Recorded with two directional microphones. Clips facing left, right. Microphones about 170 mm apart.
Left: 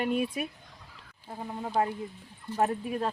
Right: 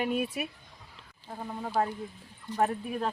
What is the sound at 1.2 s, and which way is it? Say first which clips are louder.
Speech: left 1 dB; 10° left (ahead or behind).